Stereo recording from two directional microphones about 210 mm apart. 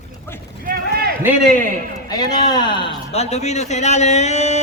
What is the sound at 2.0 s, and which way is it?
A man's voice, 20° left (ahead or behind).